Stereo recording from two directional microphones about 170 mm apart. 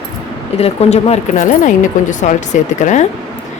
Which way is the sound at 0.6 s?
40° left (ahead or behind).